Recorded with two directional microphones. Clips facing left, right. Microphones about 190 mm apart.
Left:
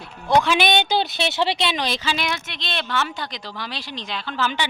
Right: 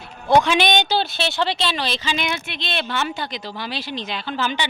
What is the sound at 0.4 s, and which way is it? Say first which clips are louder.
Speech: right 1 dB; 5° left (ahead or behind).